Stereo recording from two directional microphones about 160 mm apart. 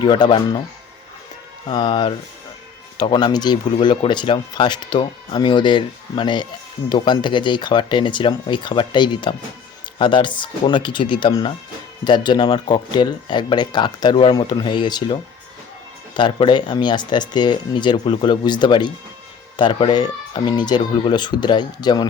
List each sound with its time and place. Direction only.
0.0 s speech: 30° left (ahead or behind)
1.6 s speech: 30° left (ahead or behind)